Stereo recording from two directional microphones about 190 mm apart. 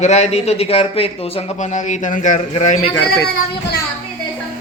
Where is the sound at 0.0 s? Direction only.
35° left (ahead or behind).